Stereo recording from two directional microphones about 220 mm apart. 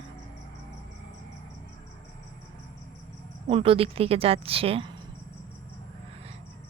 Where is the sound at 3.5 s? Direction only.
25° right (ahead or behind).